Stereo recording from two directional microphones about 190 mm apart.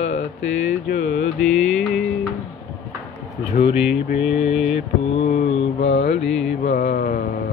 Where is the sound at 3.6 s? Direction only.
40° left (ahead or behind).